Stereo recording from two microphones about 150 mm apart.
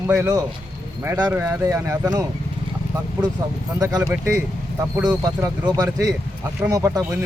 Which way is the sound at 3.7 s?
25° right (ahead or behind).